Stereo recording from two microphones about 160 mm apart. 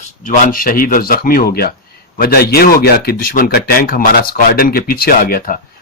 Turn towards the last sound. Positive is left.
turn(degrees=65)  # may be behind; listen again after turning